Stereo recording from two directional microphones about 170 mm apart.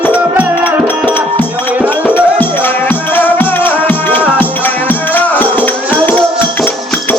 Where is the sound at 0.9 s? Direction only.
10° left (ahead or behind).